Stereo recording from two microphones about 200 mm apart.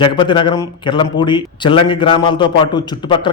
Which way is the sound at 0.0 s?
25° left (ahead or behind).